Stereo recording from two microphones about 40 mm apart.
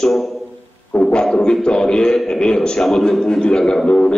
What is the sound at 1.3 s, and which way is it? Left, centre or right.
A man's voice, centre.